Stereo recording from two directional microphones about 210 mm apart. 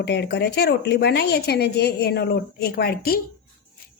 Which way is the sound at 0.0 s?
50° left (ahead or behind).